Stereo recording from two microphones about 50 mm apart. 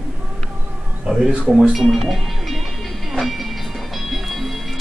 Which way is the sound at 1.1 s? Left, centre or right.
Centre.